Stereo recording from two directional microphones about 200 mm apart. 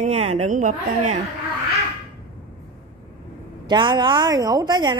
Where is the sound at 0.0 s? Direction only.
35° right (ahead or behind).